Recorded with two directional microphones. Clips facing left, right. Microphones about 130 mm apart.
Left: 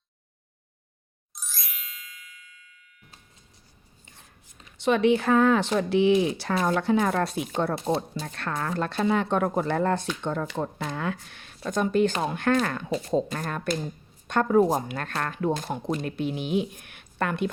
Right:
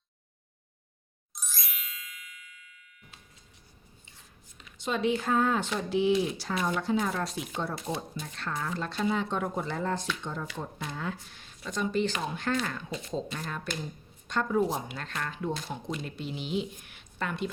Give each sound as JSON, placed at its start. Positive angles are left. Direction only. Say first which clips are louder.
{"t": 1.3, "sound": "ding", "louder": "even", "side_deg": 0}
{"t": 4.0, "sound": "a sound", "louder": "left 3 dB", "side_deg": 55}
{"t": 4.8, "sound": "speech", "louder": "left 7 dB", "side_deg": 70}